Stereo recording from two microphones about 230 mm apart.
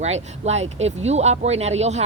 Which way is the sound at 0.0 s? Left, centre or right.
Right.